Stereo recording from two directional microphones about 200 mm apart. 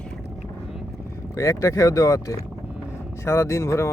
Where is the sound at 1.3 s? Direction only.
15° left (ahead or behind).